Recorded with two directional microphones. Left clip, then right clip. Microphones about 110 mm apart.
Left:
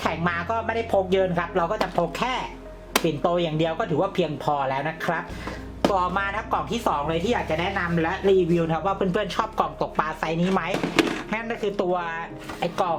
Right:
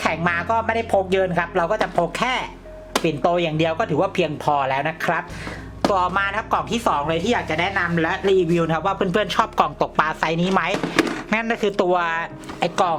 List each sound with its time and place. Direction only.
0.0 s speech: 25° right (ahead or behind); by 10.8 s 40° right (ahead or behind)
10.8 s speech: 15° right (ahead or behind)
11.3 s speech: 45° right (ahead or behind)